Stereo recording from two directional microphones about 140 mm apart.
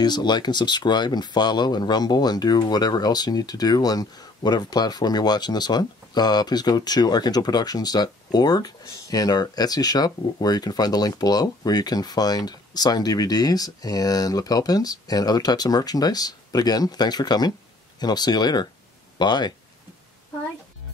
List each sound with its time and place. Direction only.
0.0 s speech: 30° left (ahead or behind)